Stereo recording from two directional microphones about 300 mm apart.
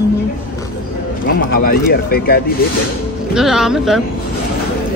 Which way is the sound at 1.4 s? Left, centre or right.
Left.